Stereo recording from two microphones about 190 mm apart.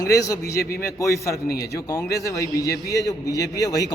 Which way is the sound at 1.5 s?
55° left (ahead or behind).